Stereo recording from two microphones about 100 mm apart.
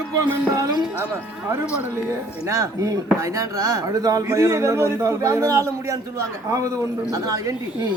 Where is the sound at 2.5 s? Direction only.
30° right (ahead or behind).